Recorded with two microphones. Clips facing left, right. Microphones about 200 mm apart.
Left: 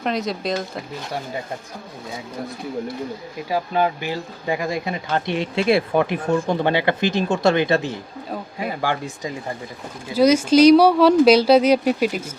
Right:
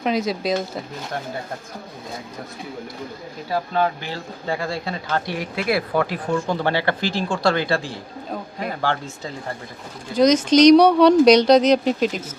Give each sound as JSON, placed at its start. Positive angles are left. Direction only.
{"t": 0.0, "sound": "speech", "side_deg": 0}
{"t": 3.5, "sound": "speech", "side_deg": 10}
{"t": 8.3, "sound": "speech", "side_deg": 10}